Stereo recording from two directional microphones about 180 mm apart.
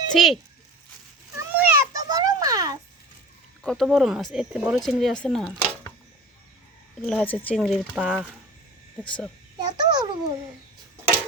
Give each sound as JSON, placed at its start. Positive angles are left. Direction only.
{"t": 0.1, "sound": "speech", "side_deg": 0}
{"t": 1.4, "sound": "a sound", "side_deg": -15}
{"t": 3.6, "sound": "speech", "side_deg": 0}
{"t": 7.0, "sound": "speech", "side_deg": 5}
{"t": 9.0, "sound": "a child's voice", "side_deg": 5}
{"t": 9.6, "sound": "a child's voice", "side_deg": -20}